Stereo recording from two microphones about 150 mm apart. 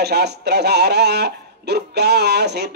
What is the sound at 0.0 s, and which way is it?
Speech, 90° right.